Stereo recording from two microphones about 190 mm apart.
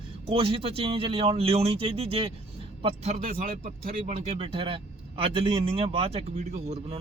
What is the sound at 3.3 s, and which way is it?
Speech, 50° right (ahead or behind).